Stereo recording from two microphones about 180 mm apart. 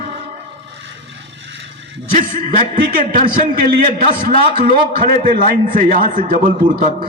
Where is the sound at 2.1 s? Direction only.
45° right (ahead or behind).